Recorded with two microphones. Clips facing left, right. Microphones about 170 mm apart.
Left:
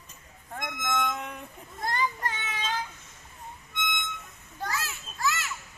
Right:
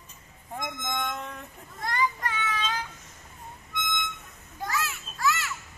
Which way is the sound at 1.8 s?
25° left (ahead or behind).